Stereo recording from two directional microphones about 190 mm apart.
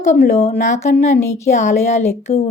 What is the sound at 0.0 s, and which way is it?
Speech, 50° left (ahead or behind).